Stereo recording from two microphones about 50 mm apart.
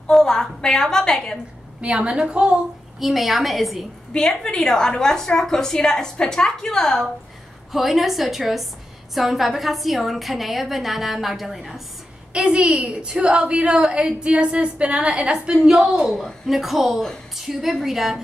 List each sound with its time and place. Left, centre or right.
0.1 s a woman's voice: centre
1.8 s speech: right
3.0 s a woman's voice: centre
4.1 s a woman's voice: centre
7.7 s a woman's voice: centre
12.3 s a woman's voice: right